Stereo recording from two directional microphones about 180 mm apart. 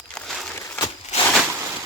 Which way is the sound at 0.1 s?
Centre (ahead or behind).